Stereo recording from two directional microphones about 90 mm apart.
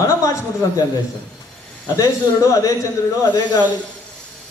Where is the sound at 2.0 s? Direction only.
35° left (ahead or behind).